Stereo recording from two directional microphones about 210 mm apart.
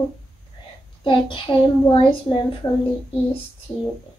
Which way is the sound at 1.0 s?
25° left (ahead or behind).